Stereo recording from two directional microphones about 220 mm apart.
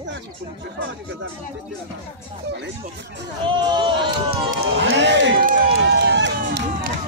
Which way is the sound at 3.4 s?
20° right (ahead or behind).